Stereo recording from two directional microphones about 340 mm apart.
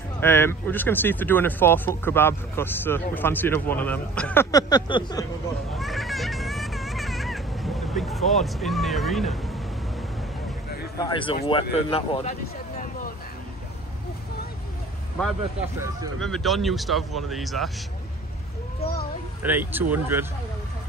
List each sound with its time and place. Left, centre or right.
0.2 s speech: centre
5.8 s a sound: centre
11.0 s speech: centre
16.2 s speech: centre
18.8 s children playing: left
19.4 s speech: centre